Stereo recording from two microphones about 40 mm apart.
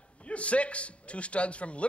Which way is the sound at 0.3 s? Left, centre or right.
Left.